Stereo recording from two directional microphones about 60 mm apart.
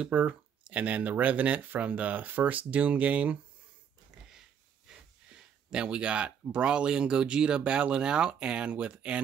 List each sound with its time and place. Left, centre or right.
0.0 s speech: right
4.3 s speech: centre